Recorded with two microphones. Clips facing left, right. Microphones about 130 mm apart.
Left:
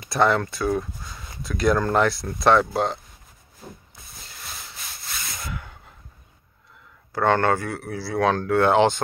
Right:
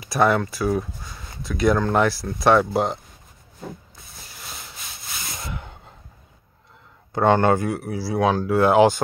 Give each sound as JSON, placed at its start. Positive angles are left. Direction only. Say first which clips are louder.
{"t": 0.0, "sound": "speech", "louder": "right 1 dB", "side_deg": -5}
{"t": 5.3, "sound": "a sound", "louder": "right 1 dB", "side_deg": -25}
{"t": 7.1, "sound": "speech", "louder": "right 3 dB", "side_deg": -20}